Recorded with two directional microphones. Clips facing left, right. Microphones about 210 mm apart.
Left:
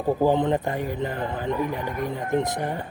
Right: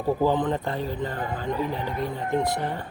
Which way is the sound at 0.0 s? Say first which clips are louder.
Left 2 dB; 15° left (ahead or behind).